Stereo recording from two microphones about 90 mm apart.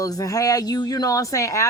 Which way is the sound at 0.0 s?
40° left (ahead or behind).